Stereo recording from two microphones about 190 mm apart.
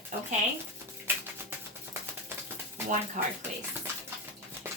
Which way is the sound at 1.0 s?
10° right (ahead or behind).